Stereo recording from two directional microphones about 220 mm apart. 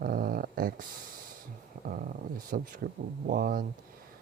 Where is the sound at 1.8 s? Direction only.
40° right (ahead or behind).